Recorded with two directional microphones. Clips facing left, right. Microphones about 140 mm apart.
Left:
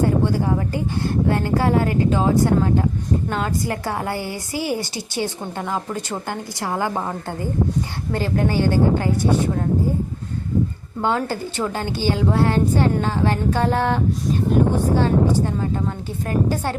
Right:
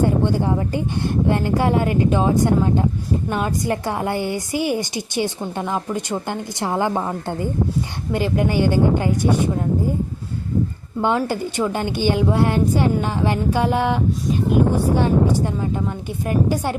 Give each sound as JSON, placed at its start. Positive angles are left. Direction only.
{"t": 0.0, "sound": "a woman's voice", "side_deg": -20}
{"t": 11.0, "sound": "a woman's voice", "side_deg": -15}